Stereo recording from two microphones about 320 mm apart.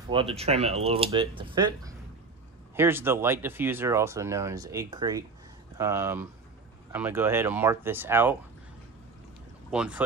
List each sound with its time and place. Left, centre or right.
0.1 s speech: centre
9.7 s speech: centre